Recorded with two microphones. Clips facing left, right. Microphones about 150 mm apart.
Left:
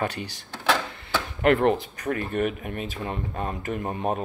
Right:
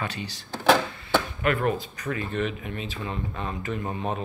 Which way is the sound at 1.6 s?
60° left (ahead or behind).